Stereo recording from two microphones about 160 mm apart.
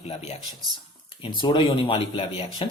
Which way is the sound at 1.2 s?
30° left (ahead or behind).